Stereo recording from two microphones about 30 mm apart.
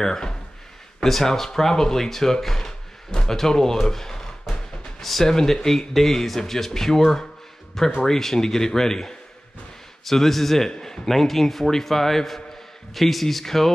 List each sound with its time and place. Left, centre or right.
0.0 s a man's voice: left
2.4 s a sound: centre
3.3 s a man's voice: centre